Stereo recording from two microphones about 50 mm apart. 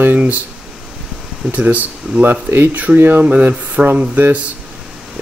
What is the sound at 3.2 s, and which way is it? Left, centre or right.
Speech, right.